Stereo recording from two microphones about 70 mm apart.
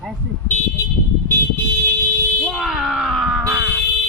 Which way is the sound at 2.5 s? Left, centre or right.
Centre.